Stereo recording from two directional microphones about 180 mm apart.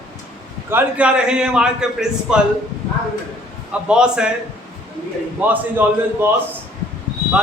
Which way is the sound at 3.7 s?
5° right (ahead or behind).